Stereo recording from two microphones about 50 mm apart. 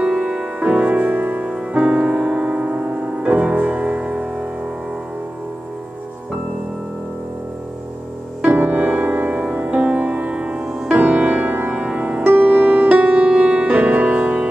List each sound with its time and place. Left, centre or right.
0.0 s music: centre
8.4 s music: right